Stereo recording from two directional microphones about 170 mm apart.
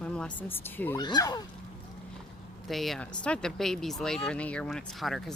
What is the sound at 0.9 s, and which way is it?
Speech, 25° left (ahead or behind).